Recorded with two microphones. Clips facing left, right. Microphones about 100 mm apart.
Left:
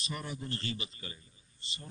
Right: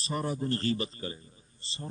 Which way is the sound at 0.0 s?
35° right (ahead or behind).